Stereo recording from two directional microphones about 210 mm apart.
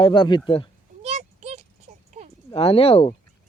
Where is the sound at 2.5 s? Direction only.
25° left (ahead or behind).